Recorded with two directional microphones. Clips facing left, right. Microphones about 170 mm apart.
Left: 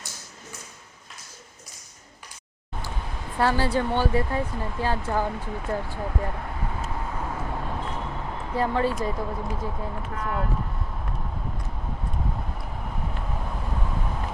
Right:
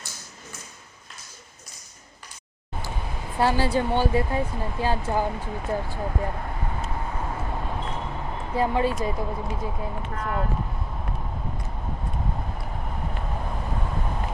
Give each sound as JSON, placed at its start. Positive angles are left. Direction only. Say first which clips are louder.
{"t": 2.7, "sound": "speech", "louder": "right 1 dB", "side_deg": -10}
{"t": 6.9, "sound": "vehicle", "louder": "even", "side_deg": -10}
{"t": 7.8, "sound": "vehicle", "louder": "even", "side_deg": -15}
{"t": 8.0, "sound": "a sound", "louder": "even", "side_deg": -5}
{"t": 8.5, "sound": "speech", "louder": "right 1 dB", "side_deg": -15}
{"t": 10.0, "sound": "speech", "louder": "right 1 dB", "side_deg": -5}
{"t": 12.5, "sound": "vehicle", "louder": "right 1 dB", "side_deg": 0}